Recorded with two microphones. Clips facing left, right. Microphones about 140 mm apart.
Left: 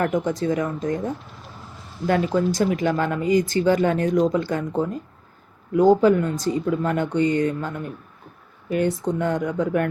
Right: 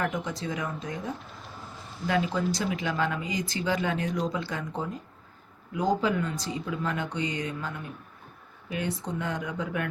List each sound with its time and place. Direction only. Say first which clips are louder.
0.0 s speech: left 9 dB; 45° left (ahead or behind)
5.7 s speech: left 11 dB; 50° left (ahead or behind)